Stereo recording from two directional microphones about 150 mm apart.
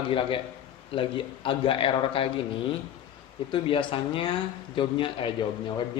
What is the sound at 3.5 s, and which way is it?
A man's voice, 35° left (ahead or behind).